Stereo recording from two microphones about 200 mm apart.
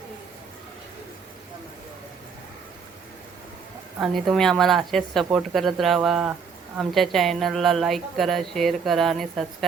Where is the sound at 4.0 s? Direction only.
Centre (ahead or behind).